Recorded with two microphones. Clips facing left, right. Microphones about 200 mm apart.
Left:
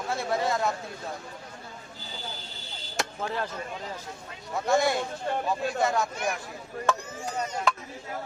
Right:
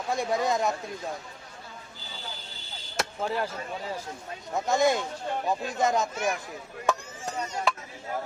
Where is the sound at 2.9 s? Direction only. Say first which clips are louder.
Right 2 dB; 10° right (ahead or behind).